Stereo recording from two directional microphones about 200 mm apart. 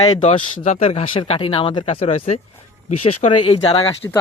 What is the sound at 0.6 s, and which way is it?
Speech, 30° left (ahead or behind).